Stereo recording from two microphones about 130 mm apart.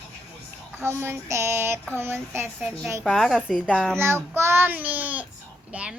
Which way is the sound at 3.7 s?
5° left (ahead or behind).